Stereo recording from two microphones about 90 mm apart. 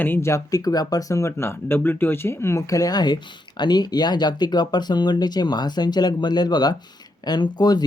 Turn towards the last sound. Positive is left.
turn(degrees=50)  # may be behind; listen again after turning